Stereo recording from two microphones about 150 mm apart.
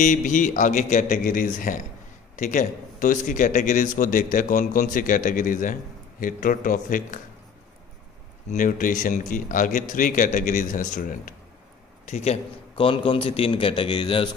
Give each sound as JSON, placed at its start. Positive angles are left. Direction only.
{"t": 0.0, "sound": "a man's voice", "side_deg": 55}
{"t": 8.5, "sound": "a man's voice", "side_deg": 60}
{"t": 12.1, "sound": "a man's voice", "side_deg": 45}